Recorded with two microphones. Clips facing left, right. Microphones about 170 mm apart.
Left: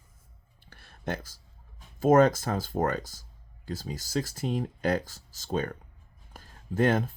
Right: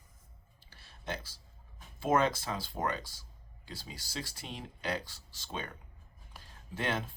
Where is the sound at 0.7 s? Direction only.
55° left (ahead or behind).